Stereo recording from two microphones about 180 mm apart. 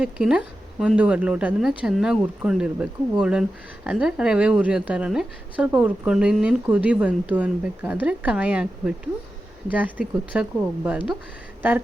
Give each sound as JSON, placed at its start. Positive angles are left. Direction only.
{"t": 0.0, "sound": "a woman's voice", "side_deg": -5}